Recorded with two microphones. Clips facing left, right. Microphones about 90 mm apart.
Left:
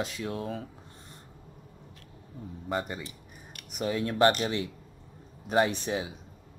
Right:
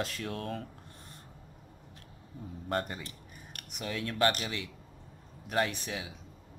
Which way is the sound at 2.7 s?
10° left (ahead or behind).